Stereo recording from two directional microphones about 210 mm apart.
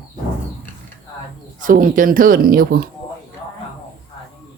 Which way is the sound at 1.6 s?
40° right (ahead or behind).